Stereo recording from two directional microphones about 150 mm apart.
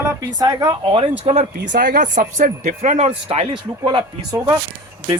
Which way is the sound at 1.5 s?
75° right (ahead or behind).